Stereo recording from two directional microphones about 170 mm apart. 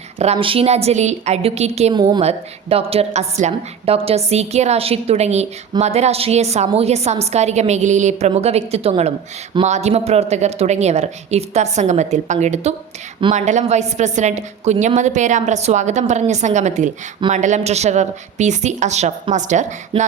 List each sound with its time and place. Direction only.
0.2 s a woman's voice: 35° right (ahead or behind)
1.9 s a woman's voice: 25° right (ahead or behind)
2.2 s a woman's voice: 35° right (ahead or behind)
19.9 s a woman's voice: 30° right (ahead or behind)